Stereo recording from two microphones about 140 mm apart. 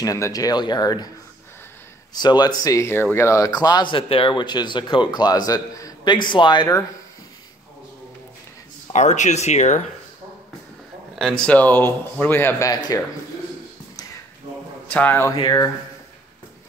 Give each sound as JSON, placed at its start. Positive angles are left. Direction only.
{"t": 0.0, "sound": "speech", "side_deg": 25}
{"t": 2.1, "sound": "a man's voice", "side_deg": 30}
{"t": 8.9, "sound": "speech", "side_deg": 55}
{"t": 11.1, "sound": "speech", "side_deg": 5}
{"t": 14.9, "sound": "speech", "side_deg": 10}
{"t": 15.3, "sound": "a man's voice", "side_deg": 30}